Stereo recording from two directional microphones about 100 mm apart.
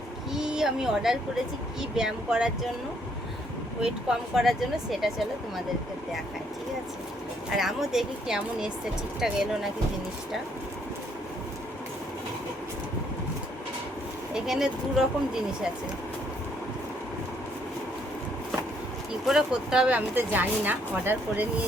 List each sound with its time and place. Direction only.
0.3 s speech: 5° right (ahead or behind)
3.8 s speech: 5° right (ahead or behind)
7.5 s speech: 5° right (ahead or behind)
14.3 s speech: 5° right (ahead or behind)
19.2 s speech: 5° right (ahead or behind)
20.1 s speech: 20° right (ahead or behind)